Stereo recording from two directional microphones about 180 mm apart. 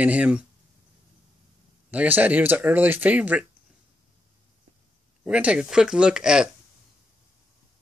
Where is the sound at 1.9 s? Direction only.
10° right (ahead or behind).